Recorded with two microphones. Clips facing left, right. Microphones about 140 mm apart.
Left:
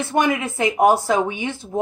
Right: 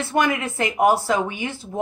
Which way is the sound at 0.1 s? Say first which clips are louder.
Left 1 dB; 15° left (ahead or behind).